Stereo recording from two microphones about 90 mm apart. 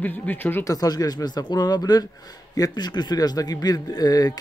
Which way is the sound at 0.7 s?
45° left (ahead or behind).